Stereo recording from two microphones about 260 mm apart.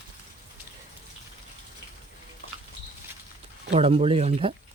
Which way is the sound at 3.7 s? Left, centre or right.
Right.